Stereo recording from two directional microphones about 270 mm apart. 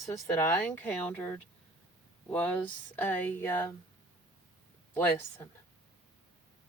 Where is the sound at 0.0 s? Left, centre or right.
Centre.